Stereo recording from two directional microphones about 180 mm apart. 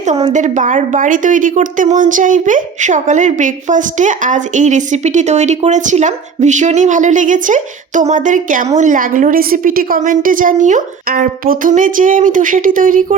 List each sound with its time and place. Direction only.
0.0 s a woman's voice: 35° right (ahead or behind)